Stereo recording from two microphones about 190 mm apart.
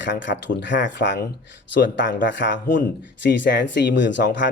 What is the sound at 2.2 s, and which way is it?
Speech, 70° left (ahead or behind).